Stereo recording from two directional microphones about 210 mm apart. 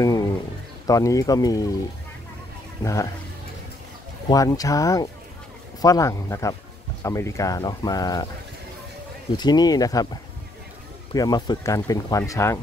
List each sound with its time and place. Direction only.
0.0 s a sound: 15° left (ahead or behind)
0.8 s speech: 15° left (ahead or behind)
2.8 s speech: 15° left (ahead or behind)
4.3 s speech: 15° left (ahead or behind)
9.4 s speech: 20° left (ahead or behind)
11.1 s speech: 20° left (ahead or behind)